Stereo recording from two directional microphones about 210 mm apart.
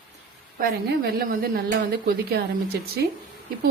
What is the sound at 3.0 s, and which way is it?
Speech, 50° right (ahead or behind).